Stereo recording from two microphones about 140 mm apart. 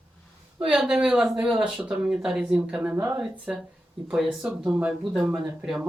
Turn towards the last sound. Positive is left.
turn(degrees=-5)  # may be behind; listen again after turning